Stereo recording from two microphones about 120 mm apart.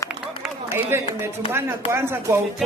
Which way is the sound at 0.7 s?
20° right (ahead or behind).